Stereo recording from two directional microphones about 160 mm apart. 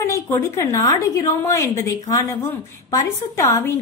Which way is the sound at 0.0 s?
15° left (ahead or behind).